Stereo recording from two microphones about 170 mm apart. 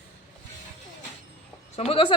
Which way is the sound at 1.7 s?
35° left (ahead or behind).